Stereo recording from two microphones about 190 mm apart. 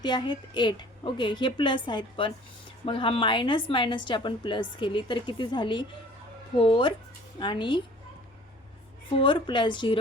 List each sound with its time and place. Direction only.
0.0 s a woman's voice: 25° left (ahead or behind)
9.2 s a woman's voice: 25° left (ahead or behind)